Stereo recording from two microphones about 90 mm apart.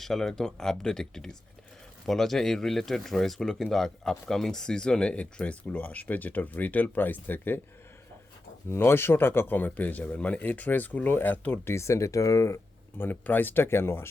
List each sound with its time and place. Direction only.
0.0 s speech: 5° left (ahead or behind); by 7.6 s 20° left (ahead or behind)
8.7 s speech: 25° left (ahead or behind)
13.0 s speech: 20° left (ahead or behind)